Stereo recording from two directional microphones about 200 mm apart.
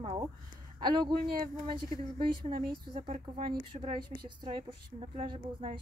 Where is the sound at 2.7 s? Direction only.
25° right (ahead or behind).